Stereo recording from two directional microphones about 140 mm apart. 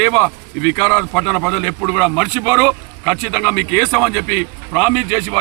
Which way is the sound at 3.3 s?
20° left (ahead or behind).